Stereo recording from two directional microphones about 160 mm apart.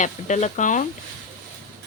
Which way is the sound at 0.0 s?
50° left (ahead or behind).